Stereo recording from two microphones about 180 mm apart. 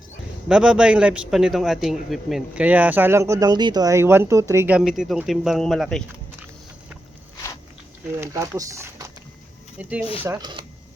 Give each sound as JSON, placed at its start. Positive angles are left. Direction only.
{"t": 0.4, "sound": "a man's voice", "side_deg": -5}
{"t": 8.2, "sound": "speech", "side_deg": -15}
{"t": 10.2, "sound": "speech", "side_deg": -20}